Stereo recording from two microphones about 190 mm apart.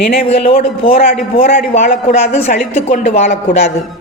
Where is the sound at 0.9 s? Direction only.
40° left (ahead or behind).